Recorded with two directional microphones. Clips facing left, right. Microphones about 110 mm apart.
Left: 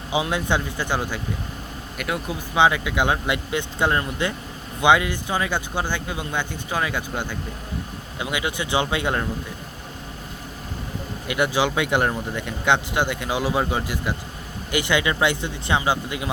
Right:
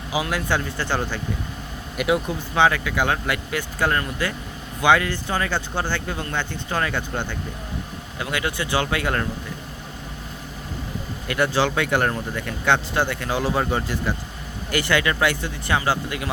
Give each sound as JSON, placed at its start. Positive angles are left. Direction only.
{"t": 0.1, "sound": "speech", "side_deg": 25}
{"t": 2.0, "sound": "speech", "side_deg": -5}
{"t": 2.6, "sound": "speech", "side_deg": 15}
{"t": 11.3, "sound": "speech", "side_deg": 15}